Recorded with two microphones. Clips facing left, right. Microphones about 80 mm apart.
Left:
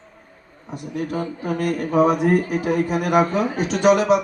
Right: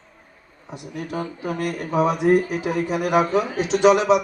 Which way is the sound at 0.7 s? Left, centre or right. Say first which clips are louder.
Left 4 dB; left.